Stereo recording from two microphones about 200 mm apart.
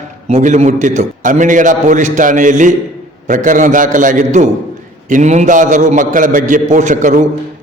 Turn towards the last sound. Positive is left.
turn(degrees=-40)  # may be behind; listen again after turning